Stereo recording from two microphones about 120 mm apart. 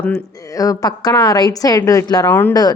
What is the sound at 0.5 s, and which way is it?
Speech, 30° left (ahead or behind).